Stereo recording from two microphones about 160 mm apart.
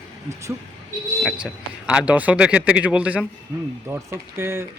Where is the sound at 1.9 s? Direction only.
5° right (ahead or behind).